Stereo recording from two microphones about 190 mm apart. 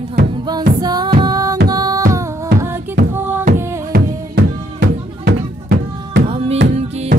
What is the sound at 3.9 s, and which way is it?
Music, 55° right (ahead or behind).